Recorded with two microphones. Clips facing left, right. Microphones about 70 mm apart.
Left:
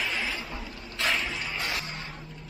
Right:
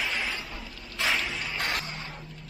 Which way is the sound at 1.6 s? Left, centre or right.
Right.